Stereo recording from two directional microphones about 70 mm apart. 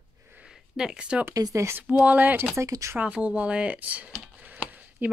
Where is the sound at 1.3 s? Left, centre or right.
Right.